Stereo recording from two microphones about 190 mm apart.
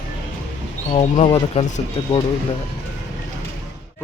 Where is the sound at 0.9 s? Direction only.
35° left (ahead or behind).